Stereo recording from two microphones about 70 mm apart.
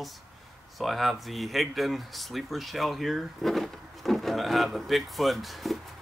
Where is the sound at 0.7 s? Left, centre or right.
Centre.